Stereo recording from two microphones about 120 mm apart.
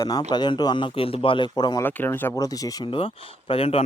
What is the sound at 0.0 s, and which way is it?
A man's voice, 35° left (ahead or behind).